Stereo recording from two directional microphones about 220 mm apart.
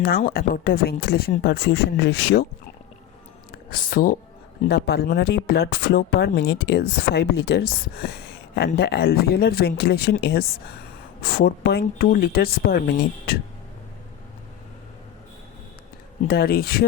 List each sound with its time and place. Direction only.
0.0 s speech: 40° left (ahead or behind)
3.5 s speech: 40° left (ahead or behind)
16.2 s speech: 45° left (ahead or behind)